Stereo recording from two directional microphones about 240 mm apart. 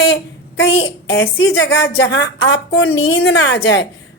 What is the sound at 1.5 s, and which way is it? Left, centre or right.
A woman's voice, left.